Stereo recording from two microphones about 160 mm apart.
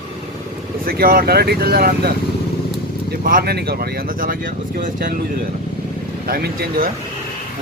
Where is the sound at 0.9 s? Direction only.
65° right (ahead or behind).